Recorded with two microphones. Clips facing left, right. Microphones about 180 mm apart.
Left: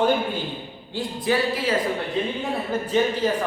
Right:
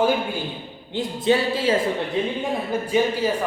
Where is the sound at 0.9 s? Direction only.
20° right (ahead or behind).